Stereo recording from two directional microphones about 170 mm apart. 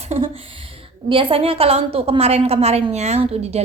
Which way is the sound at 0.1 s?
45° right (ahead or behind).